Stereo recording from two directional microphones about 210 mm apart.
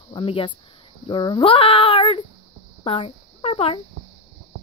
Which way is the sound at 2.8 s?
25° left (ahead or behind).